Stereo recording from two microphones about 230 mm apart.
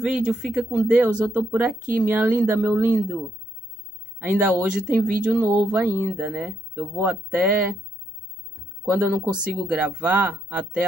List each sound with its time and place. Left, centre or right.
0.1 s speech: centre
4.3 s speech: centre
8.9 s speech: centre